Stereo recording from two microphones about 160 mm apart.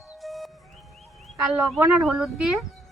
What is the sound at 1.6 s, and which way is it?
Speech, 5° right (ahead or behind).